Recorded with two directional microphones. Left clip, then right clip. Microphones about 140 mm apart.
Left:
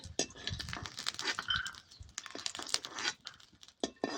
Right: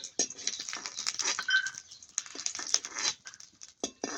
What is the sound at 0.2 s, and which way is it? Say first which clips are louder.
Goat: right 4 dB; 20° left (ahead or behind).